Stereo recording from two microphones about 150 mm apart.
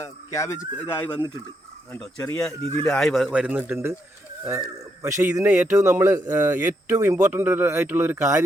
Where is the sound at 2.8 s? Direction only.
5° left (ahead or behind).